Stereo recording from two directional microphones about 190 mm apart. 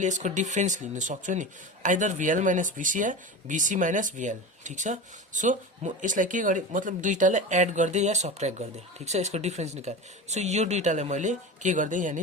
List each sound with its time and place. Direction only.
0.0 s speech: 40° right (ahead or behind)